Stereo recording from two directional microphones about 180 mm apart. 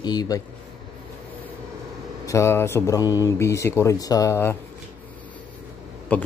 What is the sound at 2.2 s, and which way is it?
Speech, 15° left (ahead or behind).